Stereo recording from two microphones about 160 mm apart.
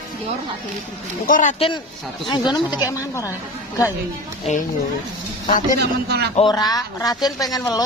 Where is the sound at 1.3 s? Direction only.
55° left (ahead or behind).